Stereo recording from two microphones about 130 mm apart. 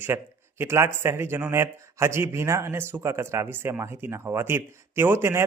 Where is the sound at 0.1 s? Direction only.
20° right (ahead or behind).